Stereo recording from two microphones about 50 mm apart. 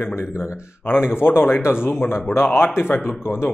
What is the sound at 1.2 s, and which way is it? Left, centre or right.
Speech, left.